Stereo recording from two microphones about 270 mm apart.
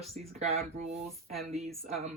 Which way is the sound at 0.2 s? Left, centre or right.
Right.